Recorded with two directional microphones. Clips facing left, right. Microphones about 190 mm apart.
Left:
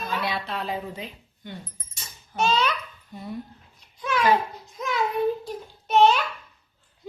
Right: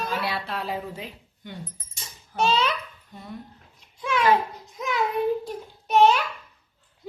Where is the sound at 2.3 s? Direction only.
30° right (ahead or behind).